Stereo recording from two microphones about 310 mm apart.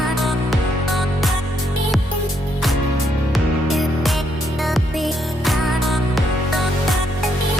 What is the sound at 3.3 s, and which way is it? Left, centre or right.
Music, centre.